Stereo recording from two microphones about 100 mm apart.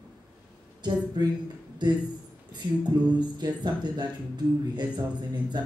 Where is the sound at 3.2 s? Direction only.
45° right (ahead or behind).